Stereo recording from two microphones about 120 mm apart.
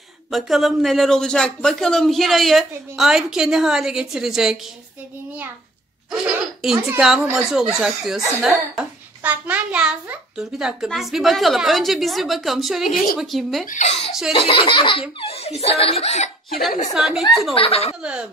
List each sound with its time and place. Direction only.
0.3 s a child's voice: centre (ahead or behind)
6.2 s a child's voice: 5° right (ahead or behind)
13.7 s speech: 75° left (ahead or behind)
14.3 s speech: 50° left (ahead or behind)
16.9 s a child's voice: 5° right (ahead or behind)
17.6 s speech: 55° left (ahead or behind)